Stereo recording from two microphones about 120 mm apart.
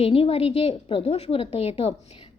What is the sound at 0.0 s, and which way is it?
A woman's voice, 50° left (ahead or behind).